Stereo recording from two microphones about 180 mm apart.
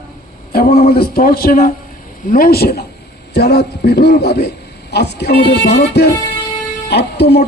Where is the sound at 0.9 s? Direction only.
55° left (ahead or behind).